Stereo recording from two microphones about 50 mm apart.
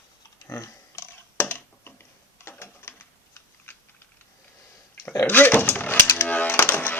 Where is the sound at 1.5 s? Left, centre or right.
Left.